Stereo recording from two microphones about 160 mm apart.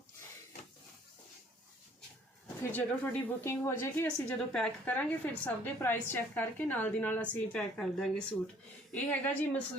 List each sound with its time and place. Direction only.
2.7 s a woman's voice: 15° left (ahead or behind)